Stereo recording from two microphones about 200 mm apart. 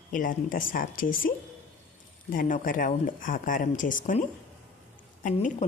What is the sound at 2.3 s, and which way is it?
Speech, 45° left (ahead or behind).